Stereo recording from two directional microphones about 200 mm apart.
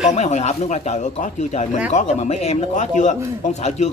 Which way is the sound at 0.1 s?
35° left (ahead or behind).